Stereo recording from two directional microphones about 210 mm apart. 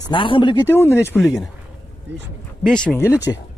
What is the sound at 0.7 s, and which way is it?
Speech, 10° left (ahead or behind).